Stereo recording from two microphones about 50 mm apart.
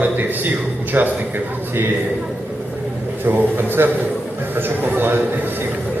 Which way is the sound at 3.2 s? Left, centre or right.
Right.